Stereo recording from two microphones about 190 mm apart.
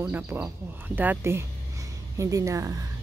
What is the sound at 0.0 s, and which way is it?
Speech, 10° right (ahead or behind).